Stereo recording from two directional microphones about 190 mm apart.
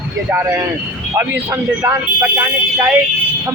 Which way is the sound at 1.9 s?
15° right (ahead or behind).